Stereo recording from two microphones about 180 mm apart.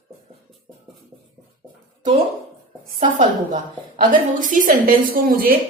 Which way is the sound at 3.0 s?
45° right (ahead or behind).